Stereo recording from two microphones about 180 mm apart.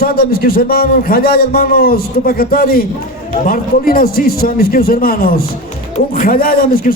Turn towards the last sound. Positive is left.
turn(degrees=50)  # may be behind; listen again after turning